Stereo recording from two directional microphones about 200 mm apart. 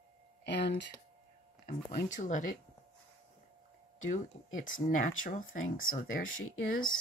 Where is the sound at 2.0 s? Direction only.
40° left (ahead or behind).